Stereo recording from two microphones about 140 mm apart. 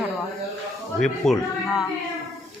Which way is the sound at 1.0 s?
Centre (ahead or behind).